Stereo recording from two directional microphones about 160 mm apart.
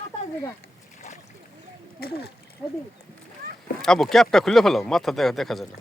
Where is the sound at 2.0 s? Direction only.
75° left (ahead or behind).